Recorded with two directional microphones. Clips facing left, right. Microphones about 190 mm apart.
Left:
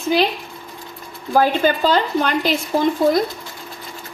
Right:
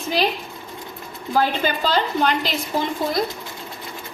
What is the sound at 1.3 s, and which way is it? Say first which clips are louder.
Speech: left 5 dB; 45° left (ahead or behind).